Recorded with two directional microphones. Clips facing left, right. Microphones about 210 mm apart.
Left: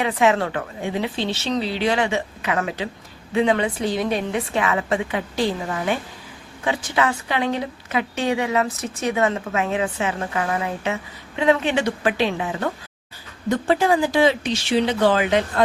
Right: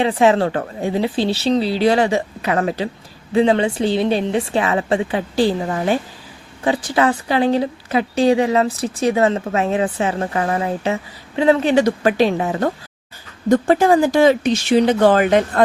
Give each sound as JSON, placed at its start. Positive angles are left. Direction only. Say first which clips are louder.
{"t": 0.0, "sound": "a woman's voice", "louder": "right 4 dB", "side_deg": -30}